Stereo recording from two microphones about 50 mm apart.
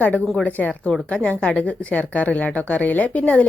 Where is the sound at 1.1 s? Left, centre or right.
Left.